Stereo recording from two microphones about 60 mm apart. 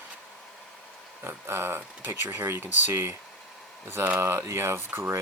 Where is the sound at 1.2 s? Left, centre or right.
Right.